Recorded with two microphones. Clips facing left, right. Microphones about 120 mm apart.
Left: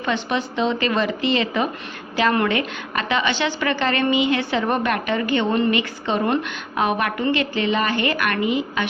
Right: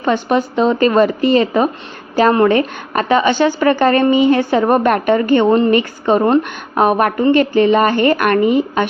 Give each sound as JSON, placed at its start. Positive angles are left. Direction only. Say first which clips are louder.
{"t": 0.0, "sound": "a woman's voice", "louder": "right 8 dB", "side_deg": -45}